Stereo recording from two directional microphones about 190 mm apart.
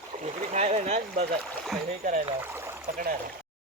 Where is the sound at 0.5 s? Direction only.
35° right (ahead or behind).